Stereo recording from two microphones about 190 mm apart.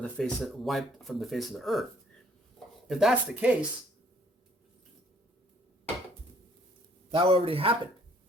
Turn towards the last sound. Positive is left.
turn(degrees=-30)  # may be behind; listen again after turning